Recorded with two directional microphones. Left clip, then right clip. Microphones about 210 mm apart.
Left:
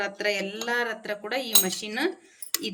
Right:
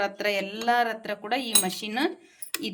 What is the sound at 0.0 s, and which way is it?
A woman's voice, 45° right (ahead or behind).